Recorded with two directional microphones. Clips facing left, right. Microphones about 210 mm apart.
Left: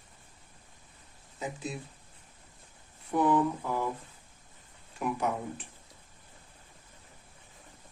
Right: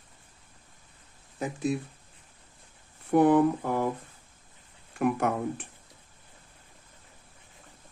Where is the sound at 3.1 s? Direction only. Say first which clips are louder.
Right 6 dB; 60° right (ahead or behind).